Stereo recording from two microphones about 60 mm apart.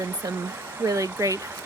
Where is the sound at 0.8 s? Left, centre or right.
Right.